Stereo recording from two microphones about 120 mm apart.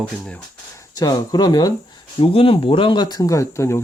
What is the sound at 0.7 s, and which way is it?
Speech, 30° left (ahead or behind).